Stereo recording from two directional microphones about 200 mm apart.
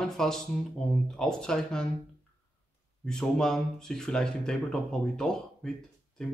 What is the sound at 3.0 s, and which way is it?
Speech, 5° left (ahead or behind).